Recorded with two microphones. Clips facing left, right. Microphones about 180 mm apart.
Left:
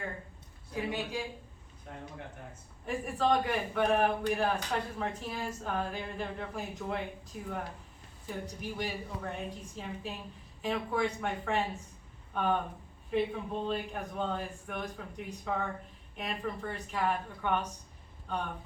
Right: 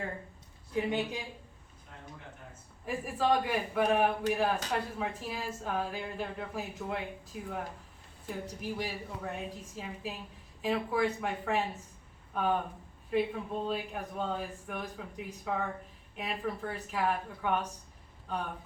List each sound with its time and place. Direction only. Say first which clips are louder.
0.9 s speech: even; 20° right (ahead or behind)
2.8 s a man's voice: even; 5° right (ahead or behind)